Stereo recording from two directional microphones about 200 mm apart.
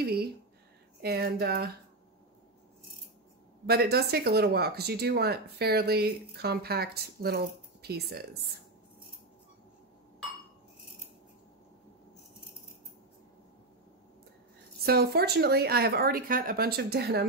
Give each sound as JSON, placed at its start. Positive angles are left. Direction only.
{"t": 0.0, "sound": "a sound", "side_deg": -50}
{"t": 1.0, "sound": "speech", "side_deg": -50}
{"t": 3.6, "sound": "speech", "side_deg": -50}
{"t": 14.8, "sound": "speech", "side_deg": -50}